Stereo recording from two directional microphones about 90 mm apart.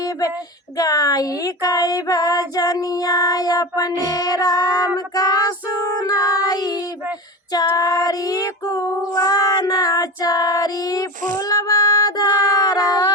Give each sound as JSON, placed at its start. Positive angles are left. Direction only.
{"t": 0.0, "sound": "child singing", "side_deg": 40}